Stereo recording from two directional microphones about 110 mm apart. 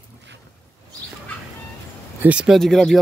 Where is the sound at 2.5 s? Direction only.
5° left (ahead or behind).